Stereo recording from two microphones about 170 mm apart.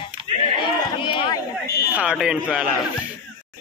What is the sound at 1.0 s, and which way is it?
Speech, 30° left (ahead or behind).